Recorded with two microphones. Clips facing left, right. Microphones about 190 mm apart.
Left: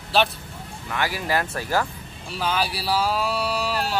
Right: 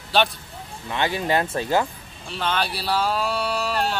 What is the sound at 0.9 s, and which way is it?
Speech, 25° right (ahead or behind).